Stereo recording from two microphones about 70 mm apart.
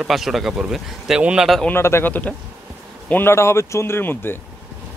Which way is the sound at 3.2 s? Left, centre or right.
Left.